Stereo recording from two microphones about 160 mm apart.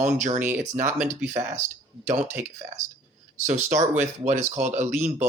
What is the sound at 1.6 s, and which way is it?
Speech, 50° right (ahead or behind).